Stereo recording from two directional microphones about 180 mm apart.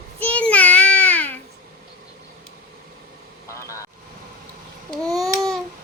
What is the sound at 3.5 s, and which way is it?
Vehicle, 15° left (ahead or behind).